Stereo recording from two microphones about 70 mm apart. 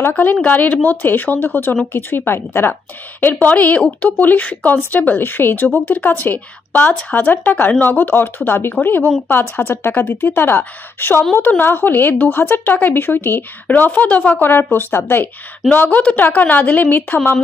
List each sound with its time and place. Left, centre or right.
0.2 s a woman's voice: left